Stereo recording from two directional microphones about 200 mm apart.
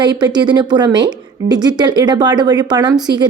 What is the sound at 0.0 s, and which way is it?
A woman's voice, 20° right (ahead or behind).